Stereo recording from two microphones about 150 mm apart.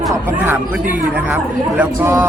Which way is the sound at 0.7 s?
10° right (ahead or behind).